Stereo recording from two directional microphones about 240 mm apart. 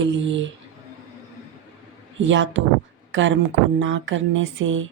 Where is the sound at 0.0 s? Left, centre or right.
Right.